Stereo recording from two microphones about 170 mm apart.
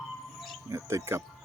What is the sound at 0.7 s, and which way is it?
Speech, 15° right (ahead or behind).